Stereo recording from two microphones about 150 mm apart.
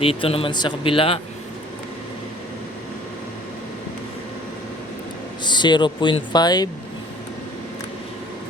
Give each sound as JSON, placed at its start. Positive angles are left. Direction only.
{"t": 0.0, "sound": "speech", "side_deg": 40}
{"t": 5.5, "sound": "speech", "side_deg": 30}